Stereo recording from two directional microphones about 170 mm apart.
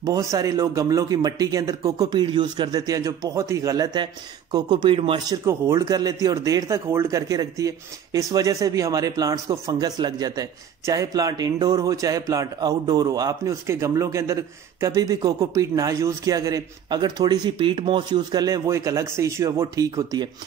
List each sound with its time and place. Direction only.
0.0 s speech: 20° right (ahead or behind)